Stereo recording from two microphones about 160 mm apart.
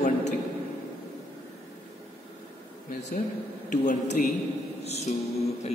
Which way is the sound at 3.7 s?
50° left (ahead or behind).